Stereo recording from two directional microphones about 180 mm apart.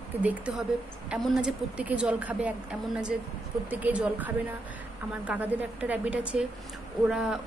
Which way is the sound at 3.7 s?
10° right (ahead or behind).